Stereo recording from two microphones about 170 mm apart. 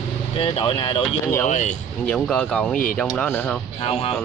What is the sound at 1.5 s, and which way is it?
Speech, 45° left (ahead or behind).